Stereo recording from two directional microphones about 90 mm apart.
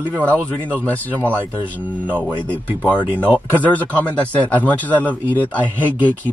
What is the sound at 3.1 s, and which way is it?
Speech, 20° right (ahead or behind).